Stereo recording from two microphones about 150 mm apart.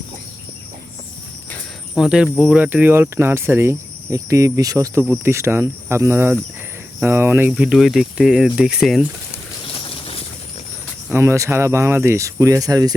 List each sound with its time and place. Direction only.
2.0 s speech: 5° right (ahead or behind)
7.5 s speech: 5° right (ahead or behind)
9.8 s a sound: 35° left (ahead or behind)
11.1 s speech: 20° right (ahead or behind)